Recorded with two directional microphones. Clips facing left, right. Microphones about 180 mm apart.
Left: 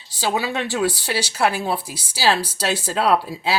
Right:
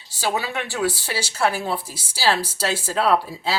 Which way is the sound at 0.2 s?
15° left (ahead or behind).